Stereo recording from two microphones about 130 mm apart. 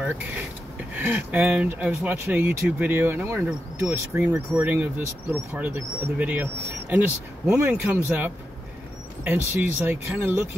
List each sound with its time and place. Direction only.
0.9 s speech: 15° right (ahead or behind)
9.2 s speech: 15° right (ahead or behind)